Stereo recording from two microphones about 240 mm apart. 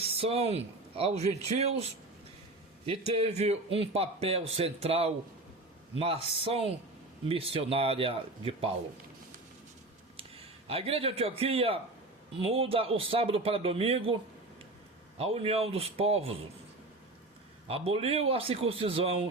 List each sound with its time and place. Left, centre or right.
0.0 s speech: right
3.1 s a man's voice: right
10.2 s a man's voice: right
15.2 s a man's voice: right
17.7 s a man's voice: right